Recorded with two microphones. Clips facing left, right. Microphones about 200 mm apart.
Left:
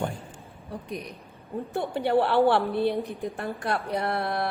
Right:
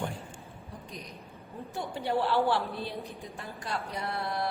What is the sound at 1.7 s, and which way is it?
A woman's voice, 60° left (ahead or behind).